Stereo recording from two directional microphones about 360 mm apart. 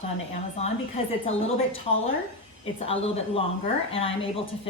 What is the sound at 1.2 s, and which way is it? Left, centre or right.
Speech, centre.